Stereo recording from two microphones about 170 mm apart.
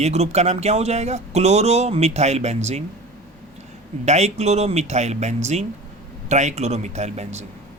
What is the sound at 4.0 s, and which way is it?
Speech, 40° right (ahead or behind).